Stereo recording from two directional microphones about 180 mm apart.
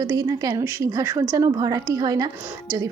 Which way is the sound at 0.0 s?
20° right (ahead or behind).